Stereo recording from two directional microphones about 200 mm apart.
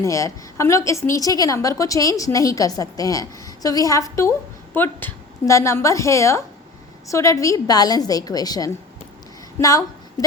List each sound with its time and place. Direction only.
0.0 s a woman's voice: 15° left (ahead or behind)